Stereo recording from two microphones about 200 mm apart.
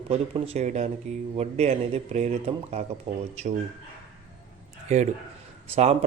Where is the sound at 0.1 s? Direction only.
30° right (ahead or behind).